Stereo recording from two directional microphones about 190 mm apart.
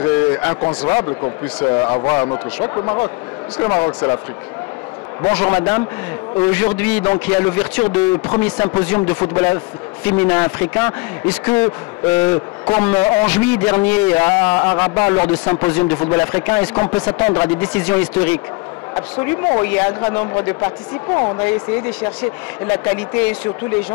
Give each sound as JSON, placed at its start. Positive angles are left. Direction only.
{"t": 0.0, "sound": "a sound", "side_deg": 10}
{"t": 1.7, "sound": "speech", "side_deg": 15}
{"t": 5.2, "sound": "speech", "side_deg": 15}